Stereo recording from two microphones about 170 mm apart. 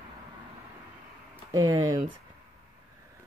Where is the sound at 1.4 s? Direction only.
25° right (ahead or behind).